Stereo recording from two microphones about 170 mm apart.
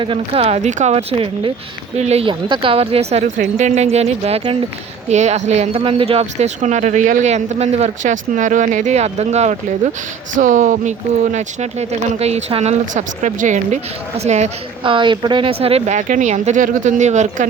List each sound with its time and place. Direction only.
0.0 s speech: 35° right (ahead or behind)
12.9 s speech: 50° right (ahead or behind)
14.9 s speech: 30° right (ahead or behind); by 17.4 s 45° right (ahead or behind)